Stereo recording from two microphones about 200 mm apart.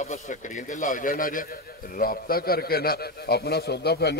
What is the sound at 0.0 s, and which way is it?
A man's voice, 40° left (ahead or behind).